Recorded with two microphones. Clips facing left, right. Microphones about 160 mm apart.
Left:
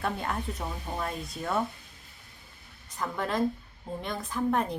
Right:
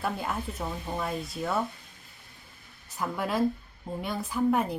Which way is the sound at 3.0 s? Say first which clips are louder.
Right 1 dB; 10° right (ahead or behind).